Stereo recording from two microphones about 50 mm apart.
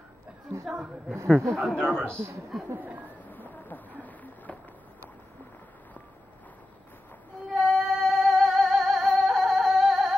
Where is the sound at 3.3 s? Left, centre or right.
Left.